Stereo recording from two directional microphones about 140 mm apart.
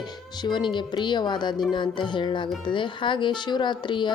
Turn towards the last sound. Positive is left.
turn(degrees=35)  # may be behind; listen again after turning